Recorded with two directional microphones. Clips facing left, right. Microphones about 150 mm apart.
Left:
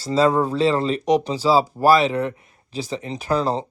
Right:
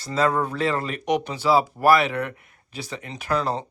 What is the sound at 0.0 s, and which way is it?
Speech, 30° left (ahead or behind).